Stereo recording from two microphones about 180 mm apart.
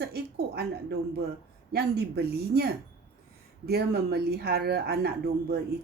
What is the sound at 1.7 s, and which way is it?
Speech, 60° right (ahead or behind).